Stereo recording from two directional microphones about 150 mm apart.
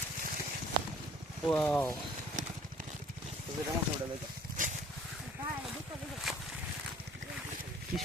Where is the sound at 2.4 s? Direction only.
55° right (ahead or behind).